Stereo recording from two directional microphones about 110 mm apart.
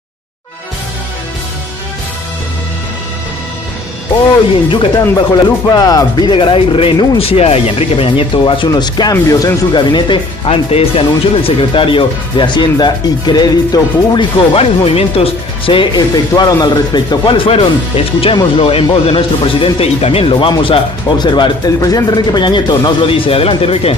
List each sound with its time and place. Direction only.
4.6 s speech: 45° left (ahead or behind)
8.6 s speech: 40° left (ahead or behind)
9.1 s speech: 25° left (ahead or behind)
9.8 s speech: 45° left (ahead or behind)
14.5 s speech: 65° left (ahead or behind)
16.3 s speech: 35° left (ahead or behind)
21.7 s speech: 30° left (ahead or behind); by 24.0 s 60° left (ahead or behind)